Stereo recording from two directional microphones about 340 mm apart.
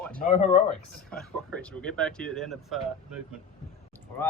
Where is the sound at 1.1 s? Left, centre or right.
Centre.